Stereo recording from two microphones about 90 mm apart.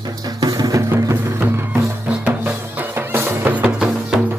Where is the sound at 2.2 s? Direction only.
20° right (ahead or behind).